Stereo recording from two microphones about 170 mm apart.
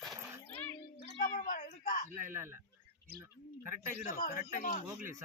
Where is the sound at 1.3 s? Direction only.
55° left (ahead or behind).